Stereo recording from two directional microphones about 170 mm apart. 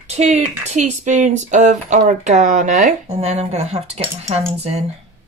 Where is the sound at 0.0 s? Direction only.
40° right (ahead or behind).